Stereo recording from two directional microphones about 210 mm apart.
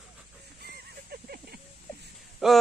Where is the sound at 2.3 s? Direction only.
Centre (ahead or behind).